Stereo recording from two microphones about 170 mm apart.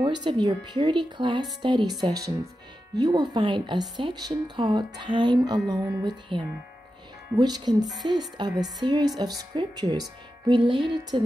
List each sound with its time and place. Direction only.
0.0 s speech: 25° right (ahead or behind)
3.0 s speech: 20° right (ahead or behind)